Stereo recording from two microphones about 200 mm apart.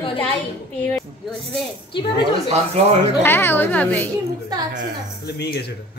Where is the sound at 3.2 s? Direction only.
10° left (ahead or behind).